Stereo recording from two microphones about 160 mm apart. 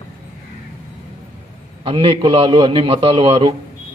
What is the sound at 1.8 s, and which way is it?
A man's voice, 35° right (ahead or behind).